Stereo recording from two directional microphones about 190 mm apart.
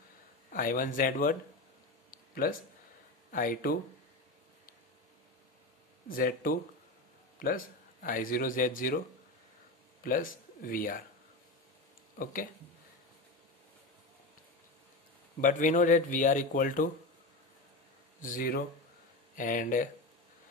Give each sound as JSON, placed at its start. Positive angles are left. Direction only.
{"t": 0.5, "sound": "speech", "side_deg": 45}
{"t": 2.0, "sound": "a sound", "side_deg": 50}
{"t": 3.3, "sound": "speech", "side_deg": 45}
{"t": 6.0, "sound": "a man's voice", "side_deg": 50}
{"t": 10.0, "sound": "speech", "side_deg": 45}
{"t": 12.2, "sound": "speech", "side_deg": 45}
{"t": 15.4, "sound": "speech", "side_deg": 45}
{"t": 18.2, "sound": "speech", "side_deg": 45}